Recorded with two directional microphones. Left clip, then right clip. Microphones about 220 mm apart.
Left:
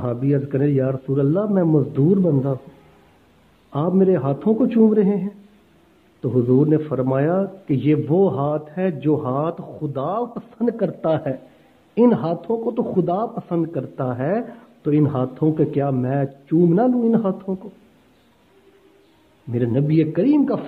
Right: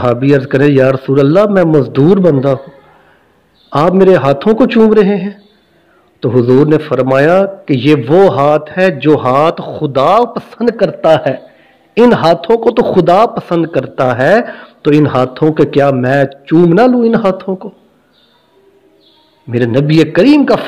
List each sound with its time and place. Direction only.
0.0 s a man's voice: 30° right (ahead or behind)
3.7 s a man's voice: 25° right (ahead or behind)
19.5 s a man's voice: 25° right (ahead or behind)